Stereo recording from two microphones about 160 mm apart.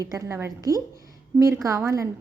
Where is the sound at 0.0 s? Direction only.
20° right (ahead or behind).